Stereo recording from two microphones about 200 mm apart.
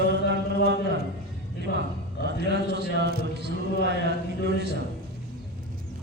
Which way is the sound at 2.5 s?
55° right (ahead or behind).